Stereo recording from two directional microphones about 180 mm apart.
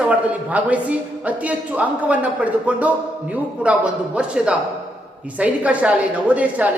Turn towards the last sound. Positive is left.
turn(degrees=-10)  # may be behind; listen again after turning